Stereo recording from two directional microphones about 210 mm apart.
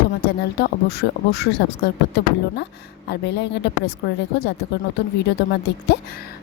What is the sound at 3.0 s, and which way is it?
Speech, 55° left (ahead or behind).